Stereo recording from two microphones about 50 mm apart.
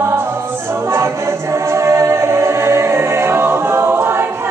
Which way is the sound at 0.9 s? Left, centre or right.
Right.